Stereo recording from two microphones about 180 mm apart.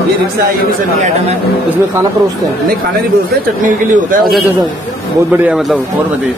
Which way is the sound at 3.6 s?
45° right (ahead or behind).